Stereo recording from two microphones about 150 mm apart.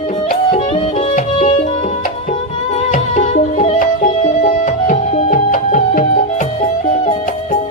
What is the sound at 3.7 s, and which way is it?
Music, 60° left (ahead or behind).